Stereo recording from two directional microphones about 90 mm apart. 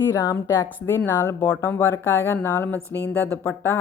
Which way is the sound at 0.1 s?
35° left (ahead or behind).